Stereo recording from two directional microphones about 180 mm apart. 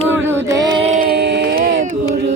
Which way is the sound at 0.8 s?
40° right (ahead or behind).